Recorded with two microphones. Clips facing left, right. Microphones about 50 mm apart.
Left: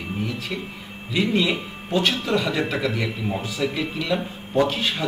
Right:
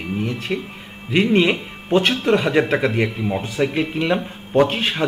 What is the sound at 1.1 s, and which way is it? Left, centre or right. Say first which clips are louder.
Speech: right 5 dB; right.